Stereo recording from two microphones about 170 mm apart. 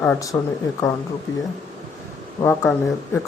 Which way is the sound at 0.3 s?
15° left (ahead or behind).